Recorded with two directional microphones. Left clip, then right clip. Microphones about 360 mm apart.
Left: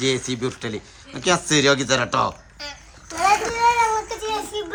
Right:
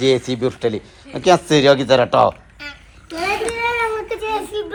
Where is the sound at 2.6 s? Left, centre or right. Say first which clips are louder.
Right 2 dB; centre.